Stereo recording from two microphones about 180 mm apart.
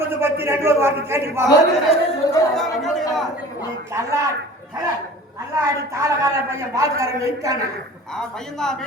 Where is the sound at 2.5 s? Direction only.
Centre (ahead or behind).